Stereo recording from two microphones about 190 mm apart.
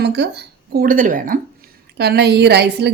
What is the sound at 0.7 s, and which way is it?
Speech, 50° right (ahead or behind).